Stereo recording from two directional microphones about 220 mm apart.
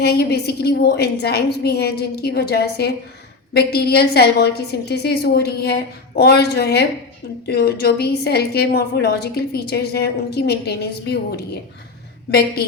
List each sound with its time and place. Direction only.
0.0 s a woman's voice: 45° left (ahead or behind)